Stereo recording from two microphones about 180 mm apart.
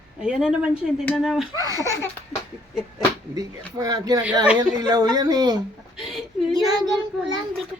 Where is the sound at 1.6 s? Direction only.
20° right (ahead or behind).